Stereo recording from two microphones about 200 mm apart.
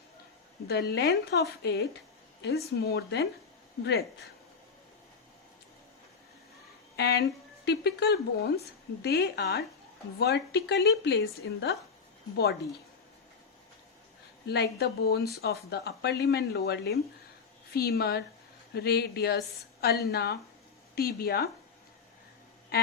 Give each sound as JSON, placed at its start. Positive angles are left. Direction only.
{"t": 0.7, "sound": "a woman's voice", "side_deg": 55}
{"t": 6.9, "sound": "a woman's voice", "side_deg": 55}
{"t": 14.4, "sound": "speech", "side_deg": 55}